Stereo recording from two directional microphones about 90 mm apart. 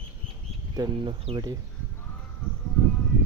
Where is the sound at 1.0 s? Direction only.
65° right (ahead or behind).